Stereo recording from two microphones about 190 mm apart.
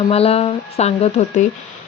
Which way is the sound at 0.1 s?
30° left (ahead or behind).